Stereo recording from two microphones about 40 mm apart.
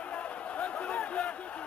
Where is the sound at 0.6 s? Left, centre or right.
Left.